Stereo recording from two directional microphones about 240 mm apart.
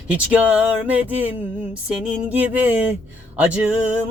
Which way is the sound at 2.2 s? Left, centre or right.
Centre.